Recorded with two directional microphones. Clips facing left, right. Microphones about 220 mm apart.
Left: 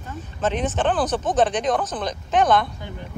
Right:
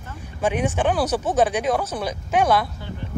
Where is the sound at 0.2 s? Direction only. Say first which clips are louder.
Right 1 dB; 10° right (ahead or behind).